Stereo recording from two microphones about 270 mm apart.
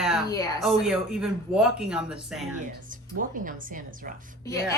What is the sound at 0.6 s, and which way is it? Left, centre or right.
Speech, centre.